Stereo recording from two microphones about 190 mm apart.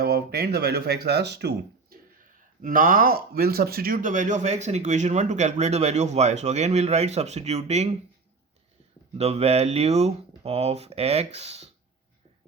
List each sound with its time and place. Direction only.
0.0 s speech: 55° right (ahead or behind)
2.6 s speech: 45° right (ahead or behind)
9.1 s speech: 35° right (ahead or behind)